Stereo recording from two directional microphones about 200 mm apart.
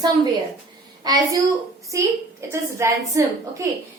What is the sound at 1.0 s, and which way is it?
A woman's voice, 20° right (ahead or behind).